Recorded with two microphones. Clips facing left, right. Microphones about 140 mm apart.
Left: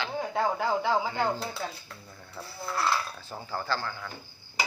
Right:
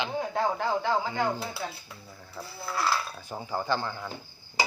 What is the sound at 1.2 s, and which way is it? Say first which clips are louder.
Speech: even; 10° right (ahead or behind).